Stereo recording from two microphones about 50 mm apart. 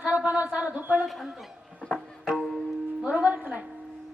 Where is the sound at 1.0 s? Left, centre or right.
Centre.